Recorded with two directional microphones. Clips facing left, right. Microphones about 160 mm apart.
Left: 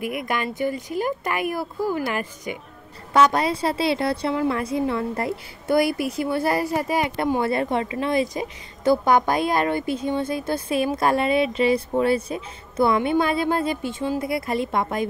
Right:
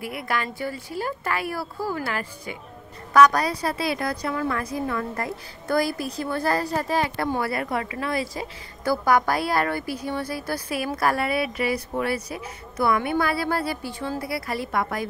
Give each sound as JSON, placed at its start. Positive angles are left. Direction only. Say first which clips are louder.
{"t": 0.0, "sound": "a woman's voice", "louder": "left 3 dB", "side_deg": 20}